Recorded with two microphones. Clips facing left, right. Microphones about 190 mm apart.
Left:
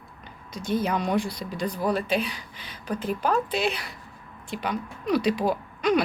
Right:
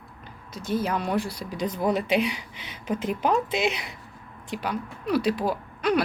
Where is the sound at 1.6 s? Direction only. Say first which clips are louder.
Right 1 dB; 20° right (ahead or behind).